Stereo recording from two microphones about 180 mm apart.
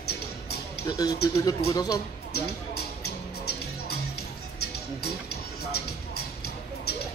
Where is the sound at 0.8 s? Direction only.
20° left (ahead or behind).